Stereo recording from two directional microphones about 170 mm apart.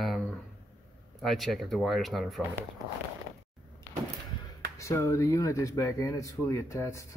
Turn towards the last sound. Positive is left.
turn(degrees=20)  # may be behind; listen again after turning